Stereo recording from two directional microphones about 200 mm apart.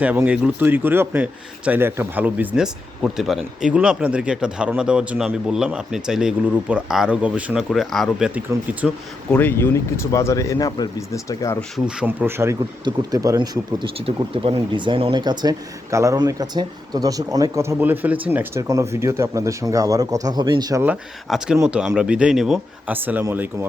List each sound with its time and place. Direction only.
0.0 s speech: 5° right (ahead or behind)
9.3 s speech: 10° left (ahead or behind)
11.9 s speech: 5° right (ahead or behind)
20.8 s speech: 5° right (ahead or behind)